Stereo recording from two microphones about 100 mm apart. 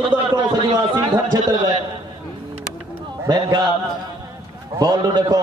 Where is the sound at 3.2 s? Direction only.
45° right (ahead or behind).